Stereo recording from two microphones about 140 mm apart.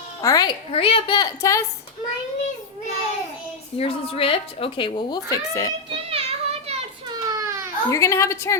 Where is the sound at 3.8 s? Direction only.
45° left (ahead or behind); by 5.7 s 25° left (ahead or behind).